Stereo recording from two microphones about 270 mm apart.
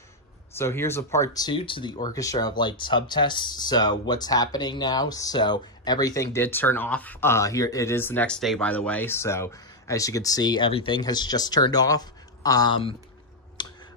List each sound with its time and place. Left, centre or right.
0.6 s speech: centre
13.6 s clicking: centre